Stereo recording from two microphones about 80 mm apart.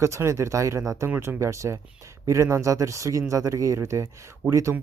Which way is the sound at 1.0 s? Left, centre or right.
Right.